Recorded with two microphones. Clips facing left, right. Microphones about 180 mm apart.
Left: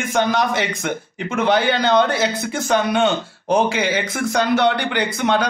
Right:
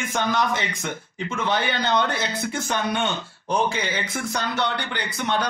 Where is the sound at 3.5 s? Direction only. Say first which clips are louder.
Left 6 dB; 90° left.